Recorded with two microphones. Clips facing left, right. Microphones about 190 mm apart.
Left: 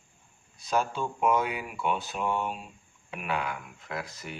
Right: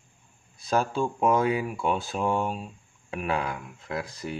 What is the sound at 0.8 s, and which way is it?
Speech, 35° right (ahead or behind).